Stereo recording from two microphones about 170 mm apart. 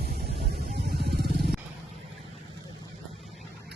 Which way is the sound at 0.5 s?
70° right (ahead or behind).